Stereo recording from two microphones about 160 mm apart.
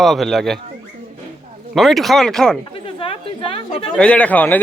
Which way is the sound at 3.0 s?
35° left (ahead or behind).